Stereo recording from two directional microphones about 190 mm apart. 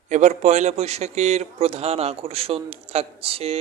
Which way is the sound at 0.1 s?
40° right (ahead or behind).